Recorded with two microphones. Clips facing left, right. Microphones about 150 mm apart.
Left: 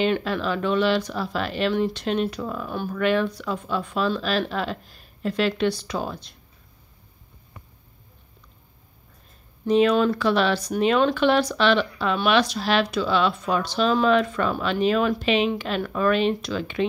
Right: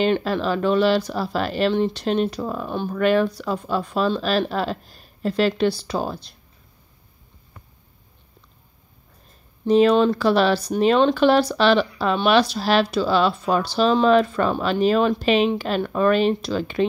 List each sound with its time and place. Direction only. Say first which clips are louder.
0.0 s speech: right 3 dB; 35° right (ahead or behind)
9.7 s speech: right 3 dB; 35° right (ahead or behind)